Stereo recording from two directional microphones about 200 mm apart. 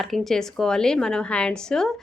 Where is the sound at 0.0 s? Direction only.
Centre (ahead or behind).